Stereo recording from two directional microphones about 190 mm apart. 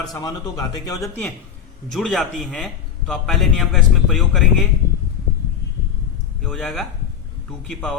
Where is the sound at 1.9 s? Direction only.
Centre (ahead or behind).